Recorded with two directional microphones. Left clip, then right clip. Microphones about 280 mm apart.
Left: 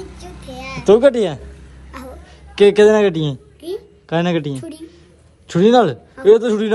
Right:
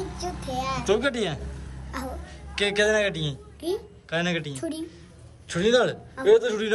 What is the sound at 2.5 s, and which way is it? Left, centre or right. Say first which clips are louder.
Speech: left 12 dB; centre.